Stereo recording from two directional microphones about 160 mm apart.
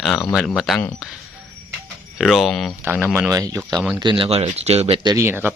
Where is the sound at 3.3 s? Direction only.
20° right (ahead or behind).